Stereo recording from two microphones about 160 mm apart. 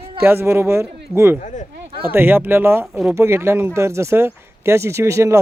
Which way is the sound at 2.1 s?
10° right (ahead or behind).